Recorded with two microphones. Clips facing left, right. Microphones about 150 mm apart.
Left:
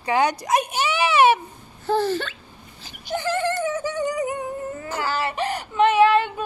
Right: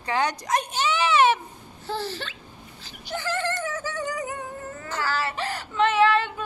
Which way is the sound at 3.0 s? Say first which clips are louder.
Left 5 dB; 15° left (ahead or behind).